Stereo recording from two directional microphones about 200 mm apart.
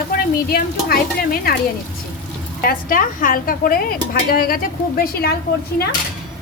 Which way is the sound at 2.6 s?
45° left (ahead or behind).